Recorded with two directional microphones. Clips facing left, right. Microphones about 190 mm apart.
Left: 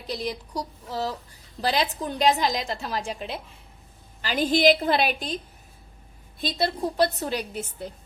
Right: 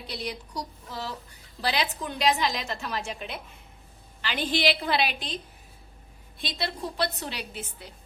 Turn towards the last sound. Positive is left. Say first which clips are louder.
# left 6 dB
turn(degrees=45)  # may be behind; listen again after turning